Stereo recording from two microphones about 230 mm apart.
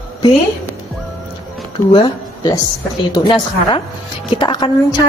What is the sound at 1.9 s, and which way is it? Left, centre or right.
A woman's voice, left.